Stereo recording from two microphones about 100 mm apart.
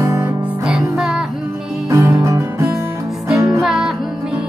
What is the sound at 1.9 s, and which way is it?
Music, 30° right (ahead or behind).